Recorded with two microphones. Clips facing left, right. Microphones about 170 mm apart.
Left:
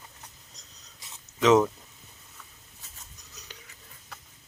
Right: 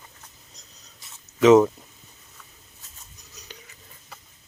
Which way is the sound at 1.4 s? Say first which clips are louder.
Right 6 dB; 5° right (ahead or behind).